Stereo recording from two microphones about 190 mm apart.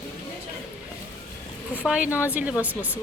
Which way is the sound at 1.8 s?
5° right (ahead or behind).